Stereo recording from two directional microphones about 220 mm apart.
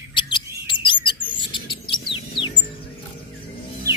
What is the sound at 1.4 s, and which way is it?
Rodents, 20° left (ahead or behind).